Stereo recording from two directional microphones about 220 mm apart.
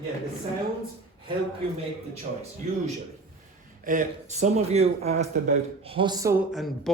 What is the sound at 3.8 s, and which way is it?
Speech, 35° right (ahead or behind).